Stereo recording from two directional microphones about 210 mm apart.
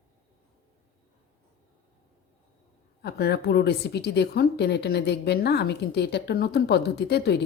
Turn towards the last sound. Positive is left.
turn(degrees=50)  # may be behind; listen again after turning